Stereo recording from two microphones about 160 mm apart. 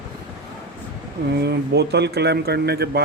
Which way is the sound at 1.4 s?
90° right.